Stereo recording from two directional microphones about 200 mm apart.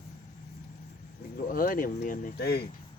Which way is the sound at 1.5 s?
45° left (ahead or behind).